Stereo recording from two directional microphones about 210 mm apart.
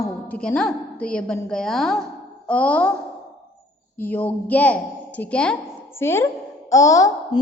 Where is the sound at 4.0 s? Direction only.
10° left (ahead or behind).